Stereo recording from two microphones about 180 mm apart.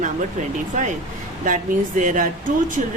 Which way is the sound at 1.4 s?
50° right (ahead or behind).